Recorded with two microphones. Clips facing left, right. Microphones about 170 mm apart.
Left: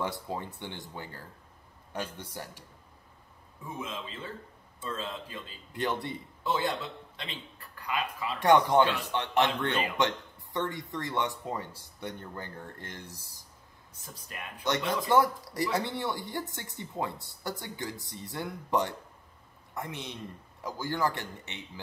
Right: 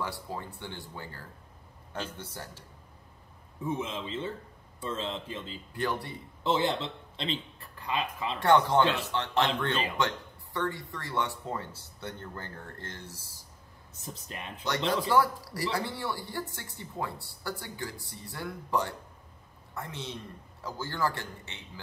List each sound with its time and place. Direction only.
0.0 s speech: 20° left (ahead or behind)
3.6 s a man's voice: 25° right (ahead or behind)
5.7 s speech: 20° left (ahead or behind)
6.4 s speech: 25° right (ahead or behind)
8.4 s speech: 15° left (ahead or behind)
13.9 s a man's voice: 25° right (ahead or behind)
15.0 s a woman's voice: 20° left (ahead or behind)